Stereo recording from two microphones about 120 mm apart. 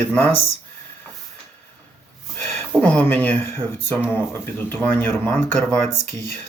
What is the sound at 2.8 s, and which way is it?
Speech, 15° left (ahead or behind).